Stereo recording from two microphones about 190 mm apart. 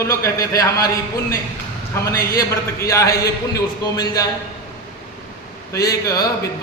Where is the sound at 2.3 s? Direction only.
15° left (ahead or behind).